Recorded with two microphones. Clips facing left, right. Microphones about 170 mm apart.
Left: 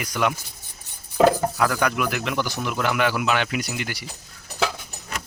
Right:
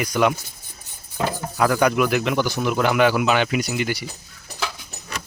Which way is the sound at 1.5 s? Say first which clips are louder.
Right 4 dB; 15° right (ahead or behind).